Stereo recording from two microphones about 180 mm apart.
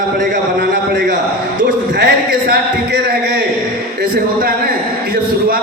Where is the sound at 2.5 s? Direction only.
65° right (ahead or behind).